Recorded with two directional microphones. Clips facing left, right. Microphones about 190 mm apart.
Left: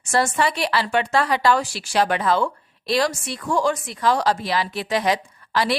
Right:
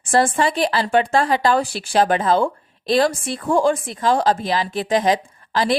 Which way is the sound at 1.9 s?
35° right (ahead or behind).